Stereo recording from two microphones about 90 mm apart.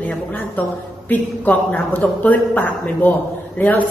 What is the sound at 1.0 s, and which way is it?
Speech, 20° left (ahead or behind).